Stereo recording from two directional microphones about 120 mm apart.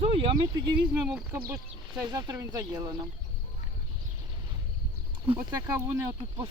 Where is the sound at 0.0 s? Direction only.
50° right (ahead or behind).